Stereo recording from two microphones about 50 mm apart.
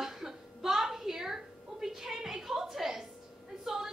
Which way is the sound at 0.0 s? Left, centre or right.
Centre.